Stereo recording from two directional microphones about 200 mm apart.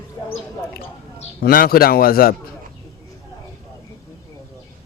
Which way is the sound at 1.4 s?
45° left (ahead or behind).